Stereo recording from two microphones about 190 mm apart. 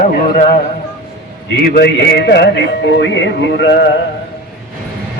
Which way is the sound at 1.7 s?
55° left (ahead or behind).